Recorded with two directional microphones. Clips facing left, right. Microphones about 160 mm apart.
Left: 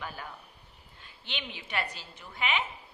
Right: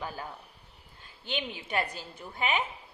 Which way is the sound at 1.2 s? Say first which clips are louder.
Right 6 dB; 40° right (ahead or behind).